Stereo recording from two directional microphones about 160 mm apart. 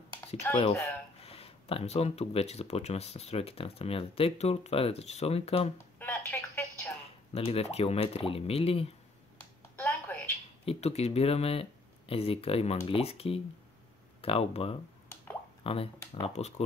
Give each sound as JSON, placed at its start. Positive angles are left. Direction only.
{"t": 1.2, "sound": "speech", "side_deg": 35}
{"t": 5.8, "sound": "telephone", "side_deg": 10}
{"t": 7.3, "sound": "speech", "side_deg": 35}
{"t": 9.6, "sound": "a sound", "side_deg": 15}
{"t": 10.6, "sound": "speech", "side_deg": 40}